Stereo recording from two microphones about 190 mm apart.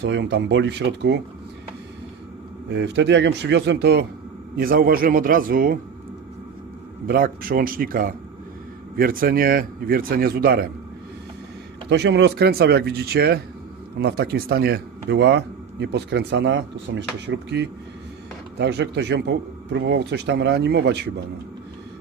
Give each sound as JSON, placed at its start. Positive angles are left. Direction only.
{"t": 0.0, "sound": "speech", "side_deg": -65}
{"t": 2.6, "sound": "a man's voice", "side_deg": -65}
{"t": 7.1, "sound": "speech", "side_deg": -50}
{"t": 11.9, "sound": "a man's voice", "side_deg": -65}